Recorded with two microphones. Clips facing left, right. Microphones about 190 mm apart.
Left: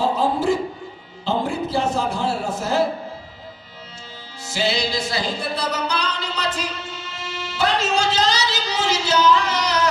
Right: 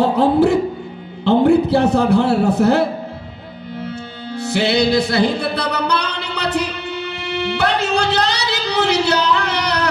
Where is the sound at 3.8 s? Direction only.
60° right (ahead or behind).